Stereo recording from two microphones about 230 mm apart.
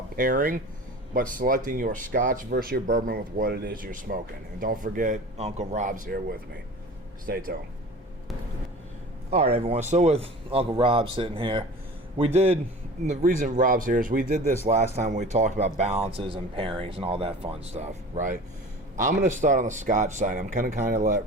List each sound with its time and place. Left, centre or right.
0.2 s speech: right
9.3 s speech: right